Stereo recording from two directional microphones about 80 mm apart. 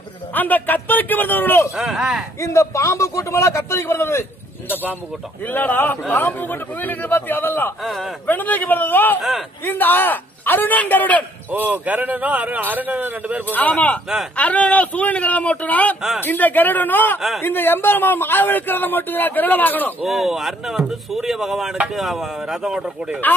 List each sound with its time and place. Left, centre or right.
0.3 s a man's voice: left
1.8 s speech: centre
2.4 s a man's voice: left
5.5 s a man's voice: left
11.5 s a man's voice: right
13.5 s a man's voice: centre
20.0 s speech: centre